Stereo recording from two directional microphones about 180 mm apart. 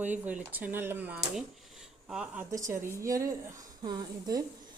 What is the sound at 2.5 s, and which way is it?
A woman's voice, 15° right (ahead or behind).